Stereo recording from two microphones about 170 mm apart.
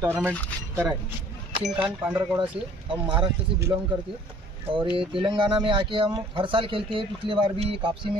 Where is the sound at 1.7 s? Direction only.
5° right (ahead or behind).